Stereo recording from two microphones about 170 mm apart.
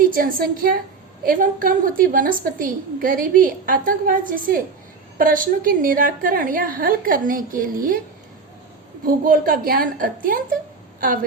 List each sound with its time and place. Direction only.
0.0 s a woman's voice: 55° right (ahead or behind)
9.0 s a woman's voice: 55° right (ahead or behind)